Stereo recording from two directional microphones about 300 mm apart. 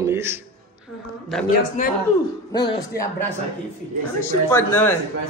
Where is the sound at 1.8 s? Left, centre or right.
Left.